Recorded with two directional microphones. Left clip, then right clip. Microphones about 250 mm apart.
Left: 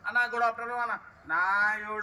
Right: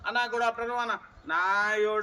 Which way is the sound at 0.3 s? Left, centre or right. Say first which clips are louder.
Even; centre.